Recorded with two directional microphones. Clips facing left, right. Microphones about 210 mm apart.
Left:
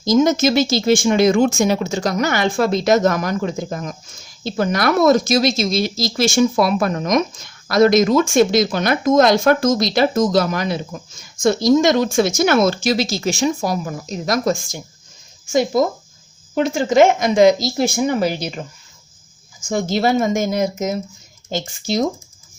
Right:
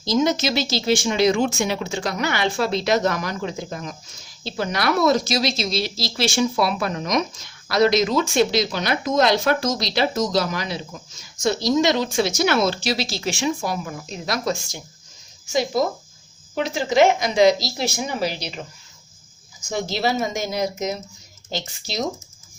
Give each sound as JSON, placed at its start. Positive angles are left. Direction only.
{"t": 0.0, "sound": "speech", "side_deg": 45}
{"t": 16.6, "sound": "speech", "side_deg": 50}
{"t": 19.6, "sound": "speech", "side_deg": 50}